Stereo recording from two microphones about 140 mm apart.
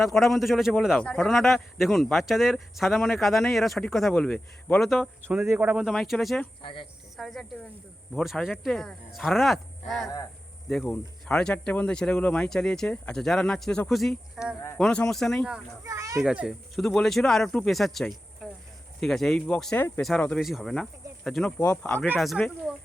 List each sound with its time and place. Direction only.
0.0 s speech: centre (ahead or behind)
5.4 s speech: 15° right (ahead or behind); by 6.5 s 5° left (ahead or behind)
6.6 s speech: 35° left (ahead or behind)
7.2 s speech: centre (ahead or behind)
15.8 s speech: 20° right (ahead or behind)
16.2 s speech: 5° right (ahead or behind)
21.6 s speech: 10° left (ahead or behind)